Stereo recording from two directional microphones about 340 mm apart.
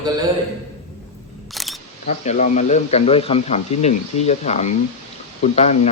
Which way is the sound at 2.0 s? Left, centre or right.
Left.